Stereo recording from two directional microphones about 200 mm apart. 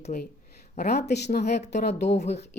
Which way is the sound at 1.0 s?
55° left (ahead or behind).